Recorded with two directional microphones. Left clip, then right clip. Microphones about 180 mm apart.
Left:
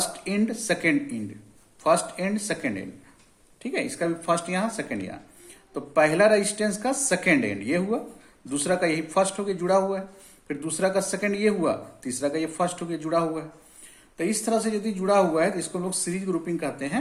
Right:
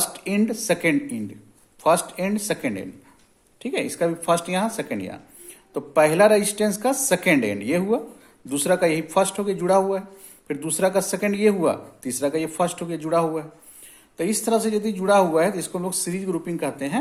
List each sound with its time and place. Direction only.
0.0 s speech: 35° right (ahead or behind)